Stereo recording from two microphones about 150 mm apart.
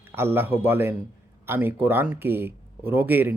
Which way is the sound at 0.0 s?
15° right (ahead or behind).